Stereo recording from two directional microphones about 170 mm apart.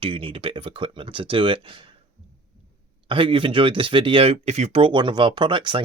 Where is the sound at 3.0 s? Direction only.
30° right (ahead or behind).